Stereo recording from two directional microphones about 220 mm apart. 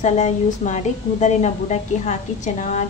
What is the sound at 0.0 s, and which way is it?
A woman's voice, 30° left (ahead or behind).